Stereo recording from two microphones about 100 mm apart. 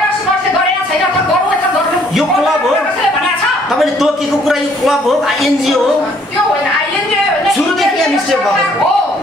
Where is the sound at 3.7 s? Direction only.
Centre (ahead or behind).